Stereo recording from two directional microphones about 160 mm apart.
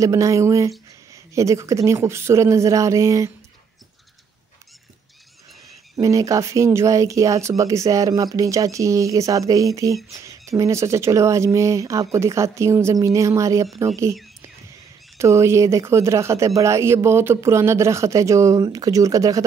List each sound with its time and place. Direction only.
0.0 s speech: 20° right (ahead or behind)
5.9 s speech: 20° right (ahead or behind)
10.1 s a sound: 20° right (ahead or behind)
10.6 s speech: 20° right (ahead or behind)
15.1 s speech: 20° right (ahead or behind)